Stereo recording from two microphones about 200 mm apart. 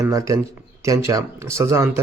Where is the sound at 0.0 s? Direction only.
15° right (ahead or behind).